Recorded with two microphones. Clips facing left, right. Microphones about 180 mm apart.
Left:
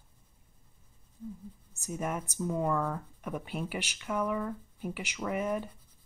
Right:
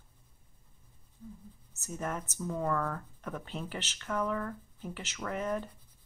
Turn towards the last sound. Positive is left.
turn(degrees=10)  # may be behind; listen again after turning